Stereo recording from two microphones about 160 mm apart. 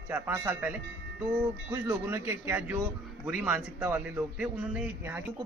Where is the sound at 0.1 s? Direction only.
10° right (ahead or behind).